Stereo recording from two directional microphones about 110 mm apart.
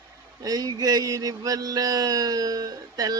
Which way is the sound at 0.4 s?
35° right (ahead or behind).